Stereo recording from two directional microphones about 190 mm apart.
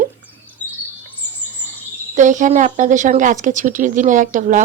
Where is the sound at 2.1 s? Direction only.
40° right (ahead or behind).